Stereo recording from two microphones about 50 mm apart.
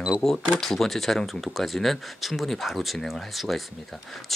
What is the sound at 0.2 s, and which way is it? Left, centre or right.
Speech, centre.